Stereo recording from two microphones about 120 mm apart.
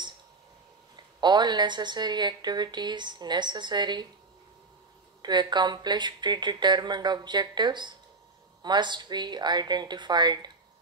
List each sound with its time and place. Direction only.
1.2 s a woman's voice: 40° right (ahead or behind)
5.2 s a woman's voice: 40° right (ahead or behind)